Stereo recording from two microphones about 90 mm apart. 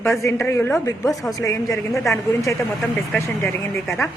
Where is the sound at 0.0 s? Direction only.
30° left (ahead or behind).